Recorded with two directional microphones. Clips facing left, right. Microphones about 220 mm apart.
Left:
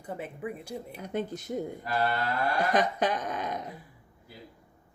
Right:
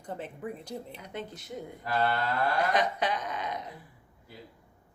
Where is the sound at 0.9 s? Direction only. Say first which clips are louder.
Left 7 dB; 45° left (ahead or behind).